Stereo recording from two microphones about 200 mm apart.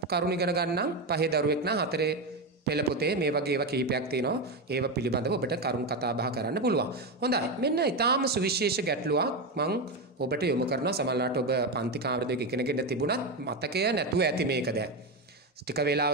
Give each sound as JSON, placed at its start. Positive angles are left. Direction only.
{"t": 0.1, "sound": "speech", "side_deg": -55}